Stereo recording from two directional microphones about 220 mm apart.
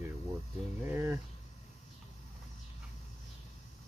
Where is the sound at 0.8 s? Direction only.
10° right (ahead or behind).